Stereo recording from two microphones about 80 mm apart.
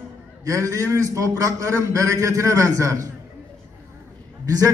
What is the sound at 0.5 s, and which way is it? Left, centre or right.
A man's voice, right.